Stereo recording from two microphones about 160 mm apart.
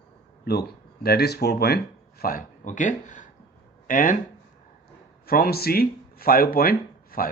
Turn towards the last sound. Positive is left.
turn(degrees=65)  # may be behind; listen again after turning